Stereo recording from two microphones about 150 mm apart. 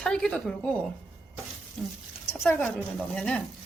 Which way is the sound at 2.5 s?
10° left (ahead or behind).